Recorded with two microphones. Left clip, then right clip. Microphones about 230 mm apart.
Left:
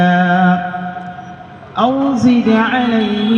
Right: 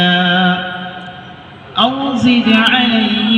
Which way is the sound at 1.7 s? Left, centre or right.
Left.